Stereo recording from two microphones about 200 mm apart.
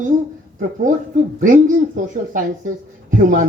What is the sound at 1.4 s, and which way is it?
Speech, 40° right (ahead or behind).